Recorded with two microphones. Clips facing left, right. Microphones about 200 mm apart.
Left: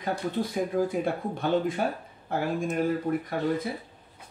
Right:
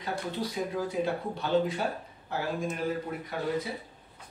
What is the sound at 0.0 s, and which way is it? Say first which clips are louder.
A man's voice: left 4 dB; 50° left (ahead or behind).